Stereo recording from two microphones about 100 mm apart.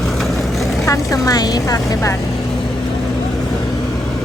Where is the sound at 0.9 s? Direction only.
35° left (ahead or behind).